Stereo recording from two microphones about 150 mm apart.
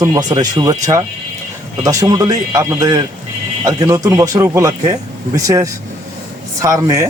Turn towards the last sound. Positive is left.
turn(degrees=-20)  # may be behind; listen again after turning